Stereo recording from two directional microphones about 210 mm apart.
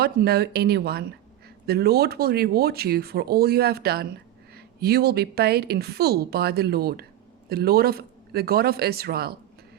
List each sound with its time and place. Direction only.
0.0 s speech: 50° right (ahead or behind)